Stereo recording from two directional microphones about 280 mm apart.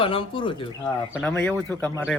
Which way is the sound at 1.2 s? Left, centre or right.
Centre.